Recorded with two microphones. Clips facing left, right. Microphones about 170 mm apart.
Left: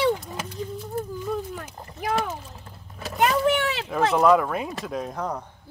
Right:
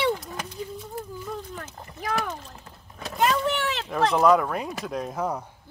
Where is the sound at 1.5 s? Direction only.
10° left (ahead or behind).